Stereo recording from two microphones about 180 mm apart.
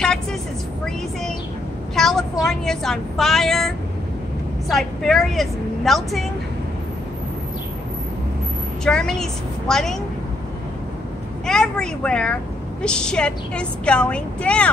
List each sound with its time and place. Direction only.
0.0 s vehicle: 5° left (ahead or behind)
2.0 s a sound: centre (ahead or behind)
2.4 s a woman's voice: 5° left (ahead or behind)
8.8 s a woman's voice: 5° left (ahead or behind)
11.4 s a woman's voice: 5° left (ahead or behind)